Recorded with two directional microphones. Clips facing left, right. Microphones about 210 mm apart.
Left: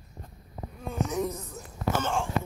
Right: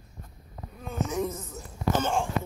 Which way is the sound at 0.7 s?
Centre (ahead or behind).